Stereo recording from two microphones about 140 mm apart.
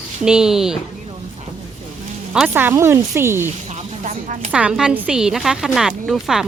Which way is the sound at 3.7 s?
60° right (ahead or behind).